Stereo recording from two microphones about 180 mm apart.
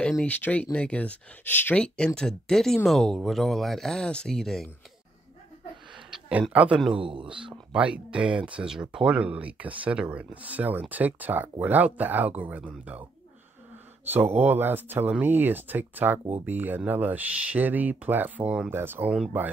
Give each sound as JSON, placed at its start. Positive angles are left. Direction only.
{"t": 0.0, "sound": "speech", "side_deg": 5}
{"t": 6.0, "sound": "speech", "side_deg": -5}
{"t": 7.0, "sound": "speech", "side_deg": -30}
{"t": 7.7, "sound": "speech", "side_deg": -5}
{"t": 14.1, "sound": "speech", "side_deg": -10}